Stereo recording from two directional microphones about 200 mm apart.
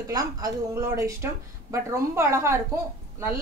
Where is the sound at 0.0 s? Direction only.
15° right (ahead or behind).